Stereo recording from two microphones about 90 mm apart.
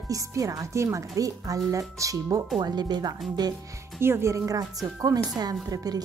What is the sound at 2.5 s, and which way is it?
Speech, 50° right (ahead or behind).